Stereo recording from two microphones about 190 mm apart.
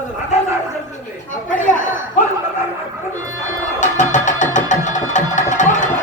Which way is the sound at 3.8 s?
40° left (ahead or behind).